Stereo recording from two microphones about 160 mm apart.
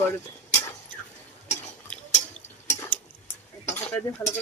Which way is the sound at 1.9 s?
5° left (ahead or behind).